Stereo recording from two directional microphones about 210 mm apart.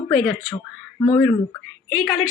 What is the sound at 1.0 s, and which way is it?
Speech, 20° left (ahead or behind).